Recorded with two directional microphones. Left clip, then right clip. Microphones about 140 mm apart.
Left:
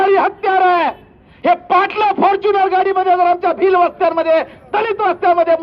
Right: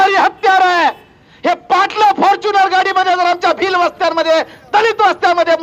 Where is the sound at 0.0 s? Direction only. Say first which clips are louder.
Right 3 dB; 55° right (ahead or behind).